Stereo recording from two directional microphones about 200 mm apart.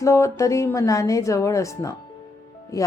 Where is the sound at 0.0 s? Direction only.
15° left (ahead or behind).